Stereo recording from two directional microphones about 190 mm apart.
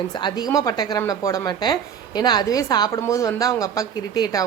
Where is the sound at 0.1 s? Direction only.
25° left (ahead or behind).